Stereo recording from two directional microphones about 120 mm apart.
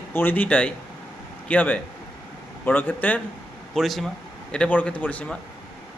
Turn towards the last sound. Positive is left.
turn(degrees=10)  # may be behind; listen again after turning